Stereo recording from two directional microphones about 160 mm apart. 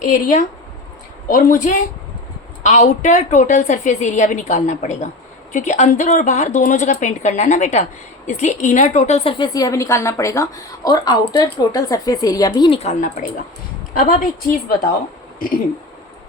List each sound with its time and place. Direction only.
0.1 s a woman's voice: 55° left (ahead or behind)
9.4 s a woman's voice: 20° left (ahead or behind); by 14.3 s 55° left (ahead or behind)